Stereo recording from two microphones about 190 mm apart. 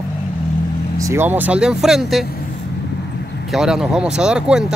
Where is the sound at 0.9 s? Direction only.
15° right (ahead or behind).